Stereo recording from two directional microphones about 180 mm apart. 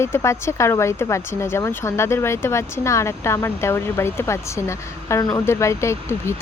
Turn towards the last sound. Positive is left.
turn(degrees=15)  # may be behind; listen again after turning